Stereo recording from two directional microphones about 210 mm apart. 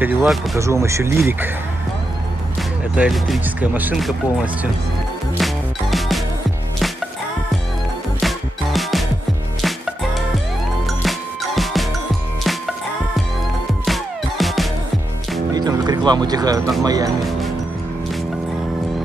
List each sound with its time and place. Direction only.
0.0 s speech: 5° right (ahead or behind)
3.0 s speech: 5° right (ahead or behind)
5.4 s music: centre (ahead or behind)
8.2 s music: centre (ahead or behind)
13.8 s music: centre (ahead or behind)
15.5 s music: 20° right (ahead or behind)
16.8 s speech: 15° right (ahead or behind)